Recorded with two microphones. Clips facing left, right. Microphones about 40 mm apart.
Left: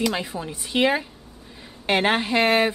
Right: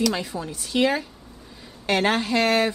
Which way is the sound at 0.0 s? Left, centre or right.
Left.